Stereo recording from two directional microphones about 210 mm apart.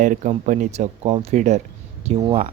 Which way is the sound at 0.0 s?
35° right (ahead or behind).